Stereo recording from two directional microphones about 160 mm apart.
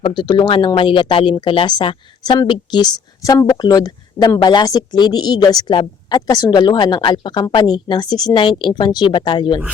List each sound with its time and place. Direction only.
0.0 s speech: 30° left (ahead or behind)